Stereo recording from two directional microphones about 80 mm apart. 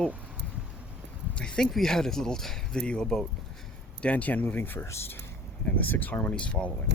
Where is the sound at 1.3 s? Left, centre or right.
Centre.